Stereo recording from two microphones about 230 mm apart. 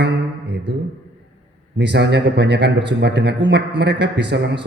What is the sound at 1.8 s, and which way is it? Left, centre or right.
Speech, right.